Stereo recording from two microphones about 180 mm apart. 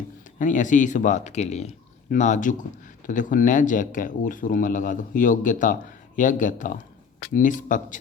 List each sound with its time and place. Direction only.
0.3 s speech: 45° left (ahead or behind)